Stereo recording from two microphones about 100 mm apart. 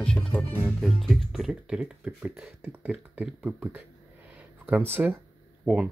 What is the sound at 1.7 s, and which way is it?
Speech, 10° right (ahead or behind).